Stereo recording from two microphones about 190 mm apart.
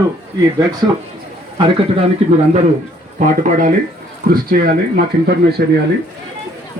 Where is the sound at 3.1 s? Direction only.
45° right (ahead or behind).